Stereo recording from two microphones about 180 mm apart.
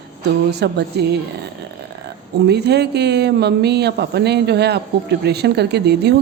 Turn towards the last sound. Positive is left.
turn(degrees=-65)  # may be behind; listen again after turning